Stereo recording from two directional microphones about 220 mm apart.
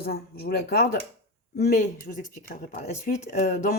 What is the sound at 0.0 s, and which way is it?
Speech, 45° left (ahead or behind).